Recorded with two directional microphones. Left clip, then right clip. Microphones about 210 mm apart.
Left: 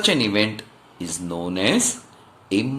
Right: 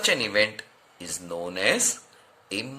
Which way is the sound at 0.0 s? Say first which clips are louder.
Left 3 dB; 25° right (ahead or behind).